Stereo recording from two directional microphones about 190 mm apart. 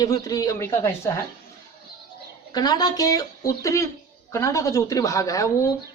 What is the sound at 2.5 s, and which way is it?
A woman's voice, 20° left (ahead or behind).